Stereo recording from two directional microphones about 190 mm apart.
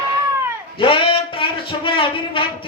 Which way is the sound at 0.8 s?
30° left (ahead or behind).